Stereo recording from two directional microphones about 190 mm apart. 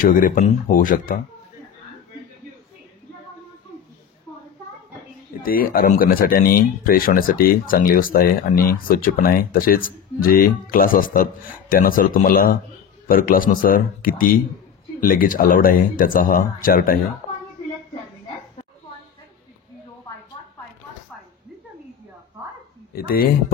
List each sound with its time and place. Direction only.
0.0 s speech: 45° left (ahead or behind)
5.4 s speech: 50° left (ahead or behind)
22.9 s speech: 50° left (ahead or behind)